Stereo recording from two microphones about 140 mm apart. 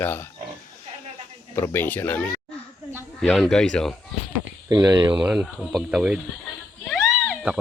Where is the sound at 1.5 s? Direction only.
15° left (ahead or behind).